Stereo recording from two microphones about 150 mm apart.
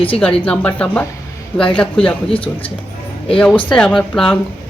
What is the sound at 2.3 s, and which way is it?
Speech, 35° left (ahead or behind).